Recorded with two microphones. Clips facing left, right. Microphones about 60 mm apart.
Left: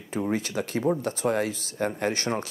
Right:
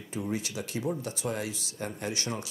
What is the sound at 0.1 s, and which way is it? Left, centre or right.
Speech, left.